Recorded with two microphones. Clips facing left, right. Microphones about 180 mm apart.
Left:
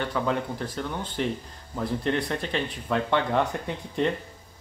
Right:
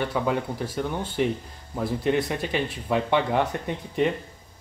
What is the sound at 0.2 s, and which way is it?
Speech, 15° right (ahead or behind).